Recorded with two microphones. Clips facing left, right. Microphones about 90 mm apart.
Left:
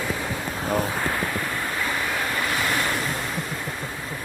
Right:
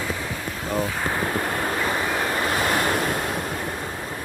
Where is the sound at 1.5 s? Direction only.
40° right (ahead or behind).